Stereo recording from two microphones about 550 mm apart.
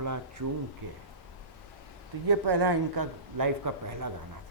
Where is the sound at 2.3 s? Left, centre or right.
Right.